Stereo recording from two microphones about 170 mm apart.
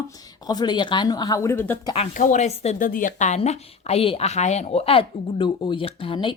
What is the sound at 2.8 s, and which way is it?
A woman's voice, 55° left (ahead or behind).